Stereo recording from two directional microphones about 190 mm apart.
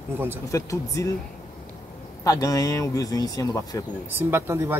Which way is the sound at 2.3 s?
15° left (ahead or behind).